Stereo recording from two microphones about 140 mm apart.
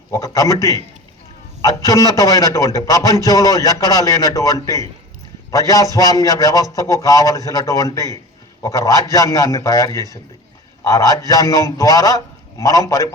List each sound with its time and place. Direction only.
0.1 s a man's voice: 25° left (ahead or behind)